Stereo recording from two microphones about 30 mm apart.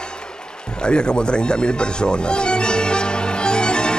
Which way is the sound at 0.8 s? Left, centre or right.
Left.